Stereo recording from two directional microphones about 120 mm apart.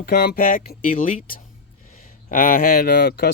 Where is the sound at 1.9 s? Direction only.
90° left.